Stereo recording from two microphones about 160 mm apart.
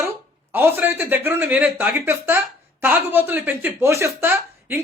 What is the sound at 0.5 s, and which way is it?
Speech, 10° right (ahead or behind).